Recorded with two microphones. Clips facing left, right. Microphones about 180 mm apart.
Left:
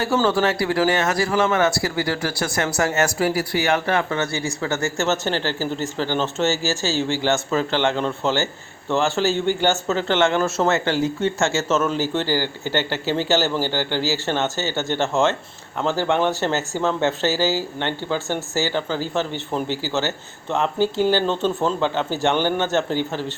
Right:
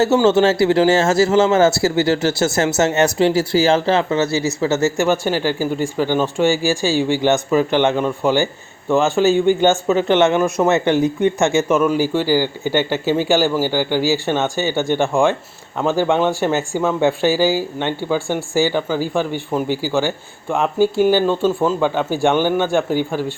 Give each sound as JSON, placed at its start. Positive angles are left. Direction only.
{"t": 0.3, "sound": "a man's voice", "side_deg": -25}